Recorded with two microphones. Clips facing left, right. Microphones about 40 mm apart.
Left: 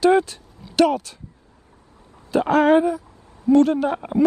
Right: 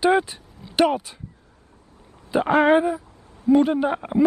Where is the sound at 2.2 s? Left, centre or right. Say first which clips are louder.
Left 1 dB; centre.